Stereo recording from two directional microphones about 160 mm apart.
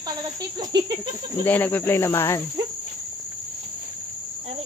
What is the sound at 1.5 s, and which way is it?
Cricket, 10° left (ahead or behind).